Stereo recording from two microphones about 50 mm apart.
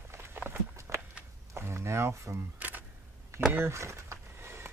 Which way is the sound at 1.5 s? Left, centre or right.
Right.